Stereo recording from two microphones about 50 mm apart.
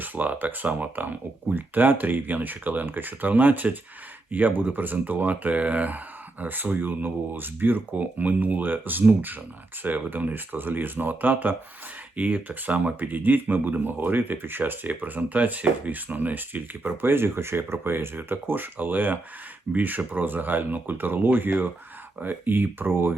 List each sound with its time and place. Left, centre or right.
0.0 s speech: right